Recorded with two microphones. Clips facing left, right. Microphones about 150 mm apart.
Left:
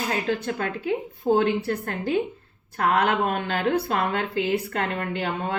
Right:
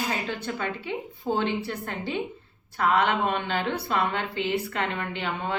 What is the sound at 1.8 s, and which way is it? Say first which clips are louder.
Speech: left 5 dB; 45° left (ahead or behind).